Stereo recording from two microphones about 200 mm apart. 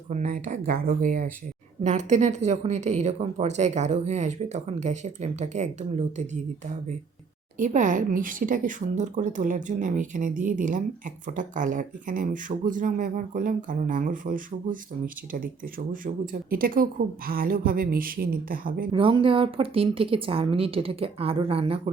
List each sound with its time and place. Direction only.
0.1 s a woman's voice: 35° right (ahead or behind)
7.6 s a woman's voice: 40° right (ahead or behind)
18.9 s speech: 25° right (ahead or behind)